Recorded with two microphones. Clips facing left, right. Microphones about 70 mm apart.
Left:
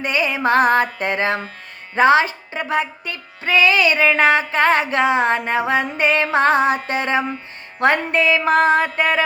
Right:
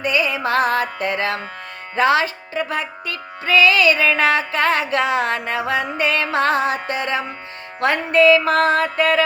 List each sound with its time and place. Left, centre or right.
0.0 s music: left